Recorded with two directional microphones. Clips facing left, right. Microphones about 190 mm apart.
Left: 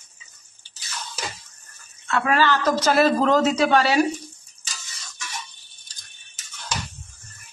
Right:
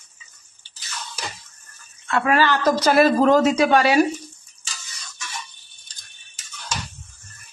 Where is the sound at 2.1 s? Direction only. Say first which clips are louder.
Right 1 dB; 15° right (ahead or behind).